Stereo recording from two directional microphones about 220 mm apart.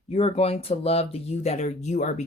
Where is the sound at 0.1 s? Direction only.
25° left (ahead or behind).